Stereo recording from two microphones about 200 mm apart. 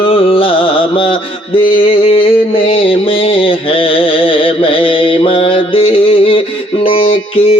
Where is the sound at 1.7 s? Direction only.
25° left (ahead or behind).